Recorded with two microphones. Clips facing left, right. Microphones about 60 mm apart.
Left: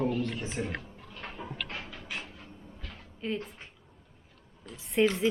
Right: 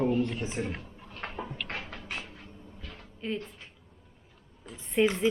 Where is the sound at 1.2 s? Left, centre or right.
Right.